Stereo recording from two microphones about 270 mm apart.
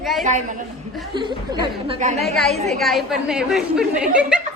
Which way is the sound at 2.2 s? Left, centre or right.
Centre.